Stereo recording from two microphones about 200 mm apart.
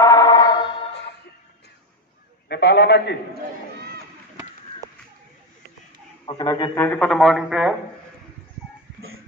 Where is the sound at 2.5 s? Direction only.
55° left (ahead or behind).